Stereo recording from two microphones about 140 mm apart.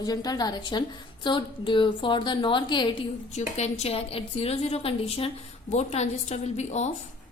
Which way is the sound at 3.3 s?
50° left (ahead or behind).